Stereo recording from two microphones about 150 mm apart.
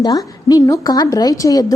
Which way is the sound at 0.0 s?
25° left (ahead or behind).